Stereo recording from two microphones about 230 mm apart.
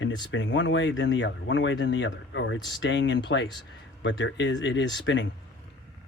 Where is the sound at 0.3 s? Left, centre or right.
Left.